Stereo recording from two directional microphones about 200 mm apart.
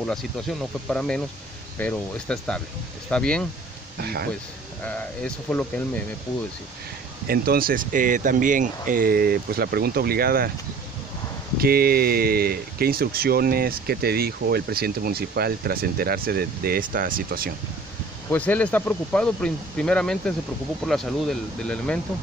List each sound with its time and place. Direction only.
0.0 s speech: centre (ahead or behind)
4.0 s speech: 50° right (ahead or behind)
4.8 s speech: 10° left (ahead or behind)
7.2 s speech: 50° right (ahead or behind)
11.5 s speech: 50° right (ahead or behind)
18.3 s speech: 10° left (ahead or behind)